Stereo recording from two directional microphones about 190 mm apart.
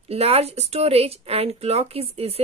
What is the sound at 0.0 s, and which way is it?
Speech, 35° right (ahead or behind).